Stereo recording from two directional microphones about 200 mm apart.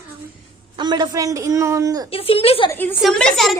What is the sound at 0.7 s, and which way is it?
A man's voice, 20° right (ahead or behind).